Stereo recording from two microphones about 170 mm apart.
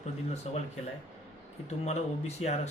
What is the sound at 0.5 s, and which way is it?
Speech, 40° left (ahead or behind).